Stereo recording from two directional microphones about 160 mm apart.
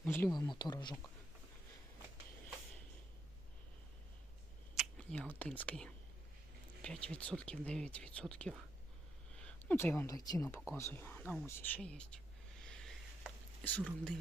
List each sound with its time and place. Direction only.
0.0 s speech: 10° left (ahead or behind)
0.3 s speech: 25° left (ahead or behind)
4.8 s speech: 5° left (ahead or behind)
9.4 s a sound: 10° left (ahead or behind)
10.2 s speech: 20° left (ahead or behind); by 12.2 s 5° left (ahead or behind)
12.7 s a sound: 5° left (ahead or behind)